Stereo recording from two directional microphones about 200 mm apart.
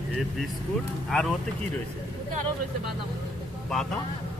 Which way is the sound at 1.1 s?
Centre (ahead or behind).